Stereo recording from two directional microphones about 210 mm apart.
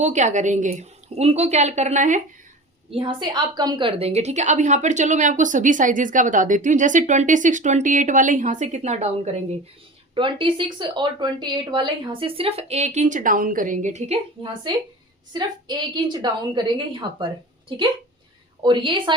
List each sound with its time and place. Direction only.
0.0 s a woman's voice: 35° right (ahead or behind)
2.9 s a woman's voice: 25° right (ahead or behind)
18.6 s speech: 20° right (ahead or behind)